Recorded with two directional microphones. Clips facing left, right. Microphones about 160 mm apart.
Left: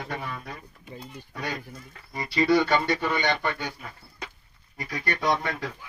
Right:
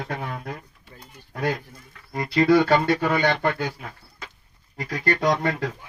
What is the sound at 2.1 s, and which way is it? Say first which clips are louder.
Speech: right 5 dB; 70° right (ahead or behind).